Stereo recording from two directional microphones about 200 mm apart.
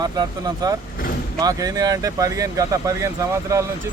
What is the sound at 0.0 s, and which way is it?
Speech, 20° right (ahead or behind).